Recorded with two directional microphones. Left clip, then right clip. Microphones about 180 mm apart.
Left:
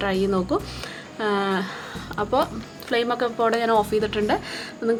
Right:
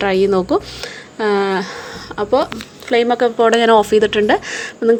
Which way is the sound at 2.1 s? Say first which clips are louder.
Right 7 dB; 30° right (ahead or behind).